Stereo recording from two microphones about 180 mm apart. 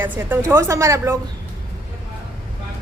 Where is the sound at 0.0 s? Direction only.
10° right (ahead or behind).